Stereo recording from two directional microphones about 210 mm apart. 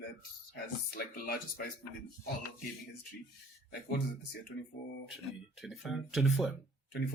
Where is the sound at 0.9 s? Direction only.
45° left (ahead or behind).